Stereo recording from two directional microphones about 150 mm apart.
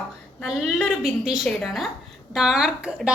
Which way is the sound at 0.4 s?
5° right (ahead or behind).